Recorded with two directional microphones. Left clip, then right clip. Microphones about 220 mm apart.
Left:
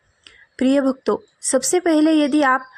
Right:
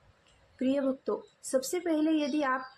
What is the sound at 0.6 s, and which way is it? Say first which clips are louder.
A woman's voice: left 12 dB; 35° left (ahead or behind).